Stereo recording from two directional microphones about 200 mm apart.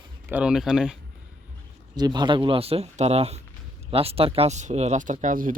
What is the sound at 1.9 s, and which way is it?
A man's voice, 20° right (ahead or behind).